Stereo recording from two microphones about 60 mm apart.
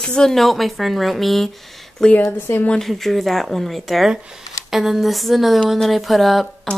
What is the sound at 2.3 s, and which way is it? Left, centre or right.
Speech, left.